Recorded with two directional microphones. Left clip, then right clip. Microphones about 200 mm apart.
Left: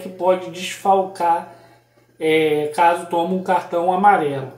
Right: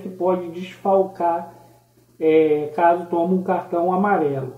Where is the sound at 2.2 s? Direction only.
10° left (ahead or behind).